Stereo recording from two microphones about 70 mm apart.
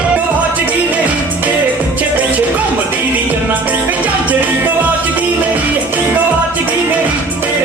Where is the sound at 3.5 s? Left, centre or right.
Right.